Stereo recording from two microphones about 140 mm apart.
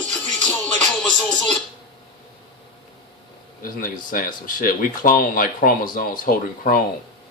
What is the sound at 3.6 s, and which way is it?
Speech, 85° left.